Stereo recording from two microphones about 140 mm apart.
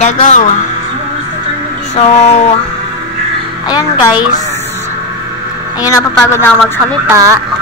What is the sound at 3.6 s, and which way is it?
Speech, 30° left (ahead or behind).